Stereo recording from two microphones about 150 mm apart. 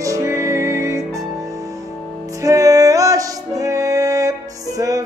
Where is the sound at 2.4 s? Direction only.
20° right (ahead or behind).